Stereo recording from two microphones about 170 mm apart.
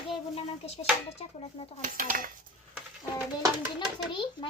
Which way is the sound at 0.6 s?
40° left (ahead or behind).